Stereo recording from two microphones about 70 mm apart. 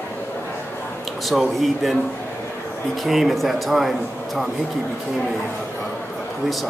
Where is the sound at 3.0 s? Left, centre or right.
Centre.